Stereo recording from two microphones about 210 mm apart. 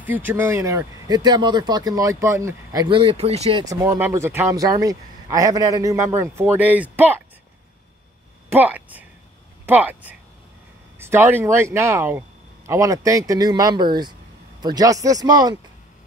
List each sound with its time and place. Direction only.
0.0 s speech: 10° right (ahead or behind); by 3.6 s 30° right (ahead or behind)
3.6 s speech: 15° right (ahead or behind)
8.5 s a woman's voice: 10° right (ahead or behind)